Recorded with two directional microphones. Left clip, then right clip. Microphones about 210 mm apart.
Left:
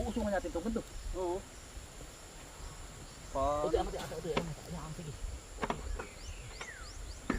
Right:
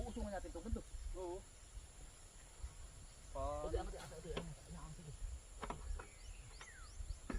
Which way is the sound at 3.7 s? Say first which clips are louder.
Left 12 dB; centre (ahead or behind).